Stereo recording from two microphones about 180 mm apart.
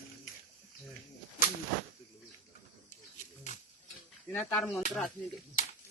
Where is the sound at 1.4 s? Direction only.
50° left (ahead or behind).